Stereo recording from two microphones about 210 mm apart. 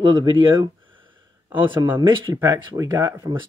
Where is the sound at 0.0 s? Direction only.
25° right (ahead or behind).